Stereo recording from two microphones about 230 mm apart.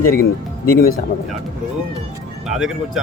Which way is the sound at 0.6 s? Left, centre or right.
Left.